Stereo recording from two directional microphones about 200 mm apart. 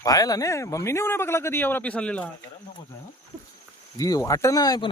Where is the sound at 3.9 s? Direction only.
15° left (ahead or behind).